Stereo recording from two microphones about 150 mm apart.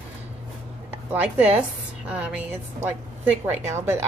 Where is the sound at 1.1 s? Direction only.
10° right (ahead or behind).